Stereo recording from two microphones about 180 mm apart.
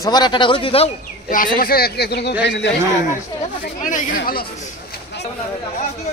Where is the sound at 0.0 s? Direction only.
25° left (ahead or behind).